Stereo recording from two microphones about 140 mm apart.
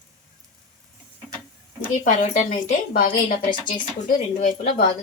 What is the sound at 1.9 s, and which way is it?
Speech, 65° left (ahead or behind).